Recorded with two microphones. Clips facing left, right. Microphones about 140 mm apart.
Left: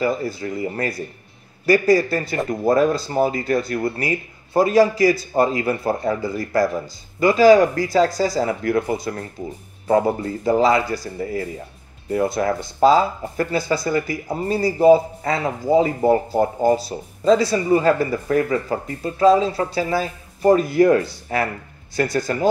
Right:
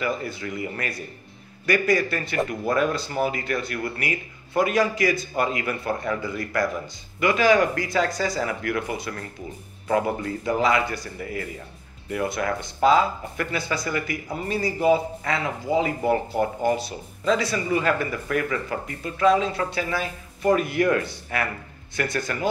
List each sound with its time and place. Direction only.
0.0 s speech: 35° left (ahead or behind)